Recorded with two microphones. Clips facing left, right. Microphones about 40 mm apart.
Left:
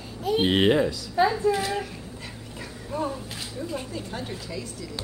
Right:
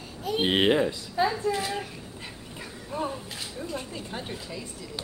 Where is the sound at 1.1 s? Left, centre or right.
Centre.